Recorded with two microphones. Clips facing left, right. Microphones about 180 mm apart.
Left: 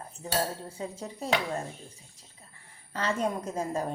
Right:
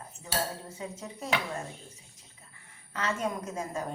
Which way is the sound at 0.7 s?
30° left (ahead or behind).